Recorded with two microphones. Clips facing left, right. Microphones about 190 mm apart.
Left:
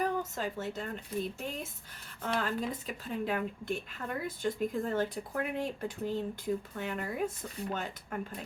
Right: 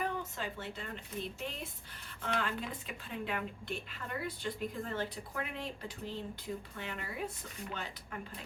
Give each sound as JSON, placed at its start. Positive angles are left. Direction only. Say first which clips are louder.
{"t": 0.0, "sound": "speech", "louder": "left 5 dB", "side_deg": 40}